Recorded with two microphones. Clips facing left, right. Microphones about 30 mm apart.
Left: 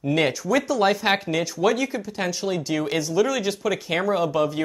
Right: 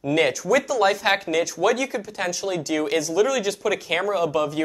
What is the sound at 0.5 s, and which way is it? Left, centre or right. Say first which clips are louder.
Speech: right 1 dB; centre.